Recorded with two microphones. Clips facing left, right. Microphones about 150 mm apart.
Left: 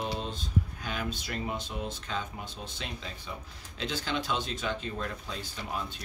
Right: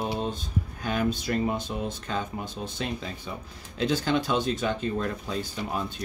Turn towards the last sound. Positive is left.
turn(degrees=-45)  # may be behind; listen again after turning